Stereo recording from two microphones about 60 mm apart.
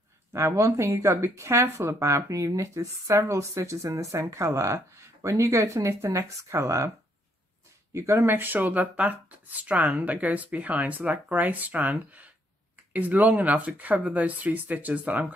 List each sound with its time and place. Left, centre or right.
0.3 s speech: right
7.9 s speech: right
8.2 s speech: right